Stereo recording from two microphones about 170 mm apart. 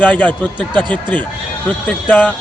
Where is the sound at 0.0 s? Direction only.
10° left (ahead or behind).